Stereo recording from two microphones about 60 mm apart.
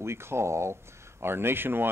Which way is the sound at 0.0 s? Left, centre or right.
Right.